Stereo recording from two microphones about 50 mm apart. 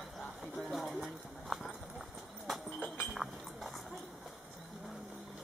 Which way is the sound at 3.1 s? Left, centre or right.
Centre.